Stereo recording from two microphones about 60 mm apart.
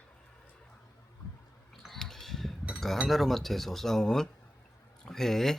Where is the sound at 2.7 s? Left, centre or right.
Centre.